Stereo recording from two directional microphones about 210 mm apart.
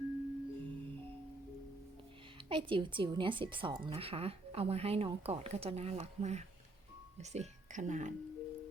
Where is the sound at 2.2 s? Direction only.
25° right (ahead or behind).